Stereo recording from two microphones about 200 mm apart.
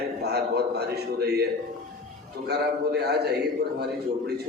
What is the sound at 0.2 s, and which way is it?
A man's voice, 55° right (ahead or behind).